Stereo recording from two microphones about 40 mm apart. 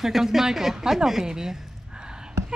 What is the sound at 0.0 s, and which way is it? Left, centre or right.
A woman's voice, centre.